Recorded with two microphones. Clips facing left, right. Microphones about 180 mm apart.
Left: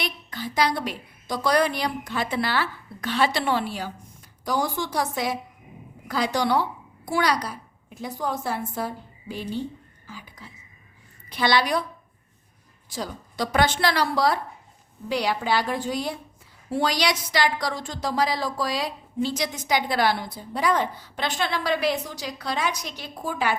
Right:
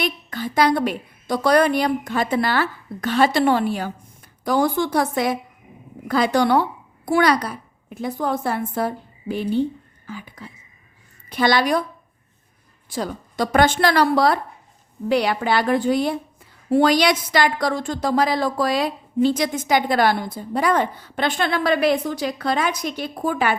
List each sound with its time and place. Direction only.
0.0 s a woman's voice: 50° right (ahead or behind)
12.9 s a woman's voice: 55° right (ahead or behind)